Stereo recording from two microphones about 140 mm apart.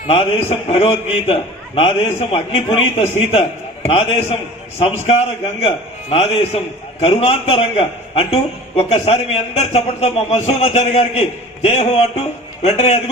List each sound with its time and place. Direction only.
0.1 s a man's voice: 45° left (ahead or behind)